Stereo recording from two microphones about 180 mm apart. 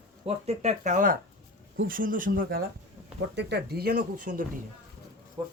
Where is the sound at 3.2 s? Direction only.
70° right (ahead or behind); by 4.4 s 50° right (ahead or behind).